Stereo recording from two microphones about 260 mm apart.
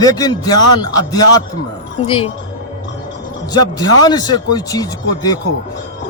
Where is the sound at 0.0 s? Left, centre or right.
Centre.